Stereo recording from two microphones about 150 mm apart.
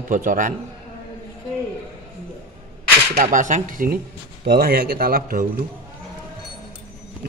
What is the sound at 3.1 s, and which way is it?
Speech, 55° right (ahead or behind).